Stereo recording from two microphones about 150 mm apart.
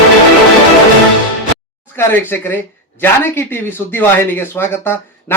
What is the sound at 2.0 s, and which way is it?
Speech, 15° left (ahead or behind).